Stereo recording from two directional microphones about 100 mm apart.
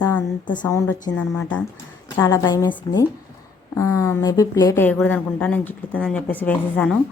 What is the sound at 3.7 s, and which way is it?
Speech, 30° left (ahead or behind).